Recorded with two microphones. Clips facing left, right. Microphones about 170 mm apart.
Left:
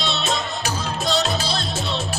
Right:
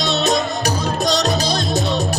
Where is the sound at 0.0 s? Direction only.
40° right (ahead or behind).